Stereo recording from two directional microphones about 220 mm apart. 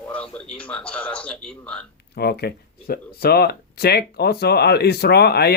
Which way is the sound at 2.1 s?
45° left (ahead or behind).